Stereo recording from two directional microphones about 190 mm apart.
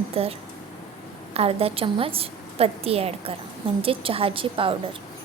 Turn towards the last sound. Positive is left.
turn(degrees=-30)  # may be behind; listen again after turning